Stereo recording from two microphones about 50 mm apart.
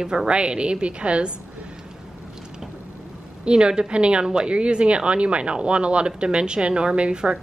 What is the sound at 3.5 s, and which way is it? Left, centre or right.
A woman's voice, centre.